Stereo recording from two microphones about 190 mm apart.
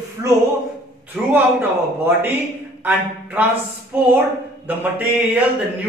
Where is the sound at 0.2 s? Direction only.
20° right (ahead or behind).